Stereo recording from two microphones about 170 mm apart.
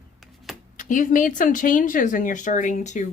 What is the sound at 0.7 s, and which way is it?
Speech, 50° left (ahead or behind).